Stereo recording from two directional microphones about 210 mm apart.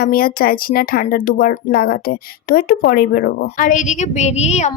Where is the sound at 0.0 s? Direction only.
45° left (ahead or behind).